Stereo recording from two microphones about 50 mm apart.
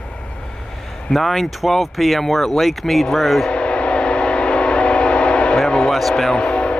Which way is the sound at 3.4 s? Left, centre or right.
Left.